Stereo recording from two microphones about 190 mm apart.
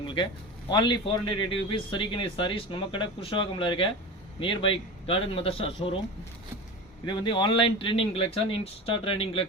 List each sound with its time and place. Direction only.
0.0 s a sound: 25° left (ahead or behind)
0.7 s a man's voice: 25° left (ahead or behind)
7.0 s a man's voice: 25° left (ahead or behind)